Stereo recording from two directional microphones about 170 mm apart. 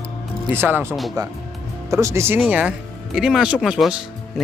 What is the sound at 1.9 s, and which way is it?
Speech, 15° right (ahead or behind).